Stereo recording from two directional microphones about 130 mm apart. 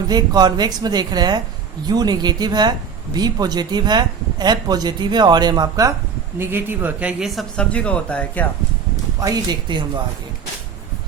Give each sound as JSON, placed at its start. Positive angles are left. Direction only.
{"t": 0.1, "sound": "speech", "side_deg": -30}
{"t": 6.4, "sound": "speech", "side_deg": -15}
{"t": 9.2, "sound": "speech", "side_deg": -30}